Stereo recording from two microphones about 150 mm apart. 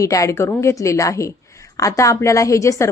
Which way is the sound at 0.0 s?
20° left (ahead or behind).